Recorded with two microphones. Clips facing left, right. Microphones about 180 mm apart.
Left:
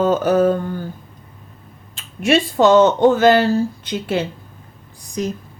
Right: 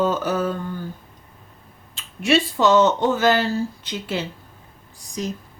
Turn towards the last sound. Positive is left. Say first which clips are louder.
# left 5 dB
turn(degrees=55)  # may be behind; listen again after turning